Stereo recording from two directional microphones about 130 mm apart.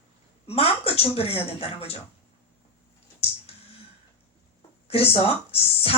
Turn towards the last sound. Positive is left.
turn(degrees=45)  # may be behind; listen again after turning